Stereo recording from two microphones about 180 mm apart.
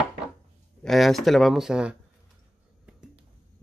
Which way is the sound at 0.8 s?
Centre (ahead or behind).